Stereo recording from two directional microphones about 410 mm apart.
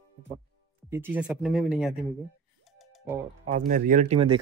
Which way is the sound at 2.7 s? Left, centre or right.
Centre.